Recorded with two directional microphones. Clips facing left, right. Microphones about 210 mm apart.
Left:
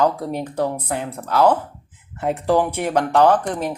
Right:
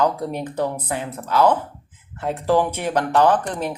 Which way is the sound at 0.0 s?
10° left (ahead or behind).